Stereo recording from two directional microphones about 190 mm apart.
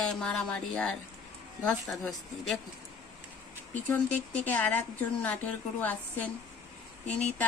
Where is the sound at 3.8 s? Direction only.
10° left (ahead or behind).